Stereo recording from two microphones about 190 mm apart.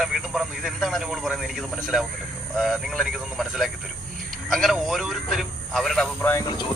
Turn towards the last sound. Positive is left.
turn(degrees=20)  # may be behind; listen again after turning